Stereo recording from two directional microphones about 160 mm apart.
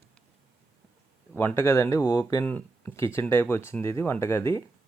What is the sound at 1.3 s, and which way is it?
Speech, 15° left (ahead or behind).